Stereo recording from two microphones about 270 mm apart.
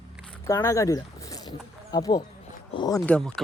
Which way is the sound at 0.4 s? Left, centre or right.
Centre.